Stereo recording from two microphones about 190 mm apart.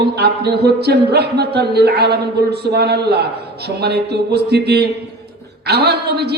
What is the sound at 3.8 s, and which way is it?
A man's voice, 60° right (ahead or behind).